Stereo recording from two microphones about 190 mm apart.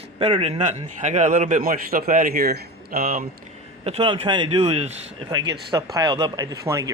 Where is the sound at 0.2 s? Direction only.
30° right (ahead or behind); by 3.2 s 50° right (ahead or behind).